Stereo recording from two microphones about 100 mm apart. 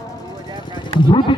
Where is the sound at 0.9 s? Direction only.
50° left (ahead or behind).